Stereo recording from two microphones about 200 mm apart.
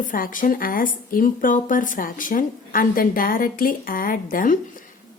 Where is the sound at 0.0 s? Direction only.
40° left (ahead or behind).